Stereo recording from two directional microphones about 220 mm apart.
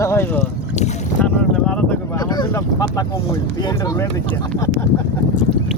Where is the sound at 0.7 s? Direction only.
30° left (ahead or behind).